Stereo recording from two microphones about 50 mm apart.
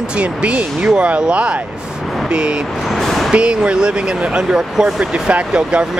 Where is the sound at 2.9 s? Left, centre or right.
Centre.